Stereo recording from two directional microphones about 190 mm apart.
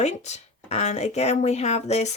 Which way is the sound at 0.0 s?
35° left (ahead or behind).